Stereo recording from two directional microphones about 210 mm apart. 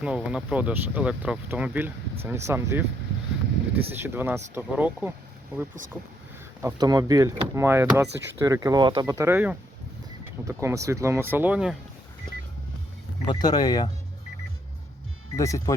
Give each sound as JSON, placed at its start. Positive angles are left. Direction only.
{"t": 0.0, "sound": "speech", "side_deg": -5}
{"t": 3.9, "sound": "speech", "side_deg": -10}
{"t": 6.6, "sound": "speech", "side_deg": -15}
{"t": 13.2, "sound": "speech", "side_deg": 20}
{"t": 15.4, "sound": "speech", "side_deg": 15}